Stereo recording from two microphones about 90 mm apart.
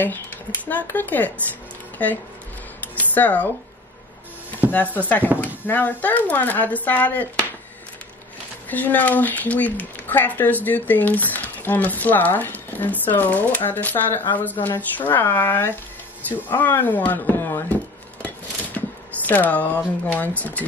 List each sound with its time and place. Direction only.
0.7 s speech: 20° left (ahead or behind)
3.0 s speech: 20° left (ahead or behind)
4.6 s speech: 20° left (ahead or behind)
8.6 s speech: 20° left (ahead or behind)
17.5 s a sound: 25° left (ahead or behind)
19.2 s speech: 20° left (ahead or behind)